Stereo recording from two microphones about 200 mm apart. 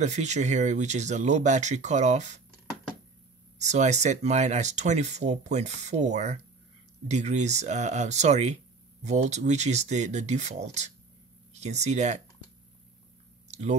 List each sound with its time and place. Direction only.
0.0 s speech: 35° right (ahead or behind)
3.5 s speech: 35° right (ahead or behind)
13.5 s a sound: 35° right (ahead or behind)